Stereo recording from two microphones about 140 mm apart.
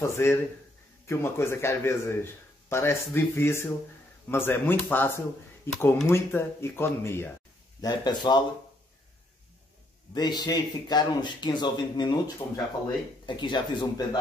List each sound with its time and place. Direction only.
0.0 s speech: 20° left (ahead or behind)
7.8 s speech: 30° left (ahead or behind)
10.1 s speech: 30° left (ahead or behind)
13.2 s speech: 35° left (ahead or behind)